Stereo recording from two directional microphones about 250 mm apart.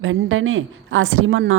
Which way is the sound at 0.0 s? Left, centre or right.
Right.